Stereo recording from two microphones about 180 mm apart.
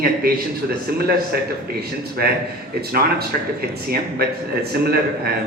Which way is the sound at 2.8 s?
60° right (ahead or behind).